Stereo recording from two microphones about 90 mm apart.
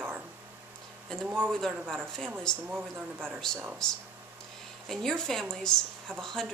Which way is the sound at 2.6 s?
20° right (ahead or behind).